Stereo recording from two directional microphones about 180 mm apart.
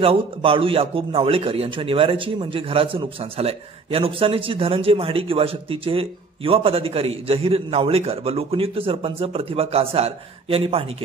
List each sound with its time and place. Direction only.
0.0 s a man's voice: 30° right (ahead or behind)